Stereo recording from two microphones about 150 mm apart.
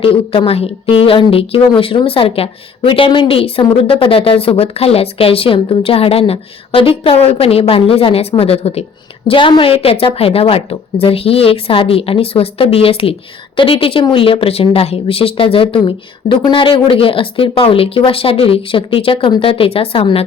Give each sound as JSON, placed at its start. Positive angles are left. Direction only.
{"t": 0.0, "sound": "a woman's voice", "side_deg": 35}